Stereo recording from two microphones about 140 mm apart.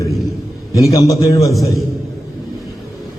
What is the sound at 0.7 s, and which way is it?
Speech, 25° left (ahead or behind).